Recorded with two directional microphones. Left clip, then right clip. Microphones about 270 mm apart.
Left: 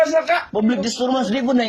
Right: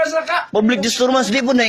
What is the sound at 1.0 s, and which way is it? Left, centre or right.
Speech, right.